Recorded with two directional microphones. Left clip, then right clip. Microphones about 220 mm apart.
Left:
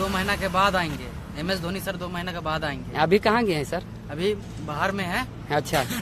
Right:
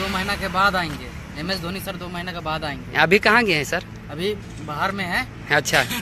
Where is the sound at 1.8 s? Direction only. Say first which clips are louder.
Even; centre (ahead or behind).